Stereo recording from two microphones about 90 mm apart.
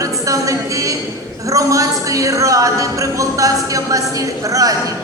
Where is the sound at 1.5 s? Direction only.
40° right (ahead or behind).